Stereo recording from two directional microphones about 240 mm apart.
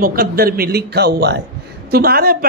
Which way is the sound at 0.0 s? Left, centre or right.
Right.